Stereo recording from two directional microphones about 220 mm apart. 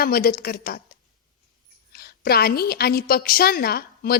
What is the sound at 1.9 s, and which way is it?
A woman's voice, 45° left (ahead or behind).